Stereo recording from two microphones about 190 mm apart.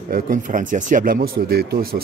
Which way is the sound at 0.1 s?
45° right (ahead or behind).